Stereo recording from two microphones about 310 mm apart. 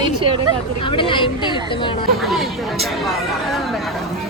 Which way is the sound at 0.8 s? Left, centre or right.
Centre.